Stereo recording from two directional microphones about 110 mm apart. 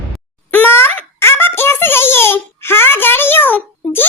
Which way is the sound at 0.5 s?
20° left (ahead or behind).